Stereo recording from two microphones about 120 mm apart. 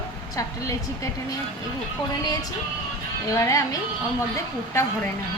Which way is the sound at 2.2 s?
30° left (ahead or behind).